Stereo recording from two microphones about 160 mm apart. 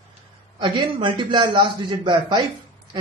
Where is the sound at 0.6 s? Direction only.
30° right (ahead or behind).